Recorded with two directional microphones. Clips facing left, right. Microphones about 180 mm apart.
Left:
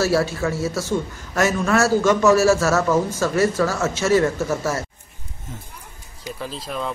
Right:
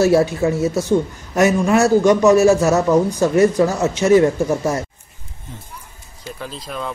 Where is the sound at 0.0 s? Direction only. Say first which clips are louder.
Right 6 dB; 20° right (ahead or behind).